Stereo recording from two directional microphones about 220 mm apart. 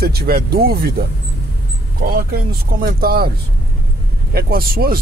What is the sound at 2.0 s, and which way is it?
Speech, 45° right (ahead or behind).